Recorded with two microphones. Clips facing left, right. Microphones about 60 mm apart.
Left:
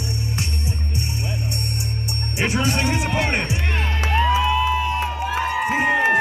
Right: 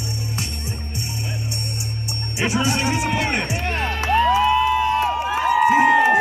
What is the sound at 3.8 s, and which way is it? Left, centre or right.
Music, centre.